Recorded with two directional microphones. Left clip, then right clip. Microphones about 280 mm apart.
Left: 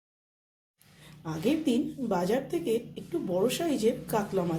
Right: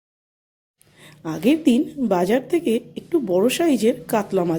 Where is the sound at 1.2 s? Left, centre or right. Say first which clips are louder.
Right 10 dB; right.